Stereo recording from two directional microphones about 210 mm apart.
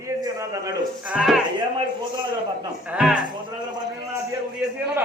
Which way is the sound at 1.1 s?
Centre (ahead or behind).